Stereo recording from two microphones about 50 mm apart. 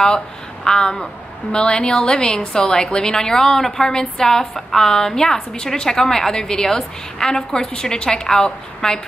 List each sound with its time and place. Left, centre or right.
0.7 s a woman's voice: left